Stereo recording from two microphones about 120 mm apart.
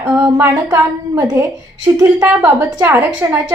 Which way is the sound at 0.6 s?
25° right (ahead or behind).